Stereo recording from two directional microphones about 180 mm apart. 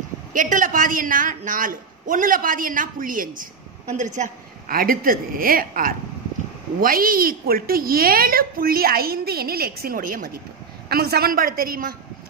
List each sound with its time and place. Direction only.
0.3 s a man's voice: 45° right (ahead or behind)